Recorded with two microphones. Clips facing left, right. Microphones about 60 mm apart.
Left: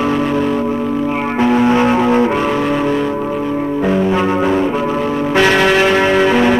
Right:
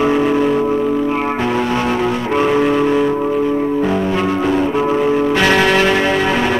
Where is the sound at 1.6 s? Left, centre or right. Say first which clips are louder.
Left 5 dB; left.